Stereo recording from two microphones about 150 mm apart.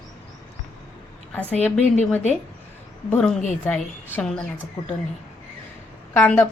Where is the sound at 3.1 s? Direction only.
5° left (ahead or behind).